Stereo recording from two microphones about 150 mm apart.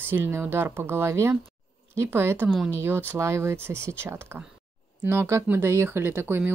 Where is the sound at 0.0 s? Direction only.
15° right (ahead or behind).